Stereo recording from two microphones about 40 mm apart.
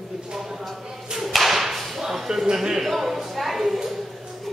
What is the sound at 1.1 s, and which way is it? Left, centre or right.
Whip, centre.